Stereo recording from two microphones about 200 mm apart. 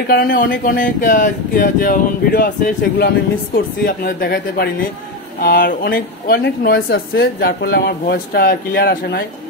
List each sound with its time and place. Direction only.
0.1 s speech: 45° left (ahead or behind)